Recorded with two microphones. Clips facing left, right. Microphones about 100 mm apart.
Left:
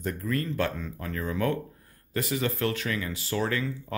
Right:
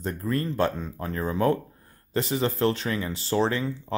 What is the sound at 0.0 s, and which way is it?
Speech, 30° right (ahead or behind).